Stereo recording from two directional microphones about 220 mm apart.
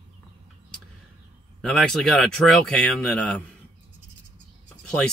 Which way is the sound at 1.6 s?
5° left (ahead or behind).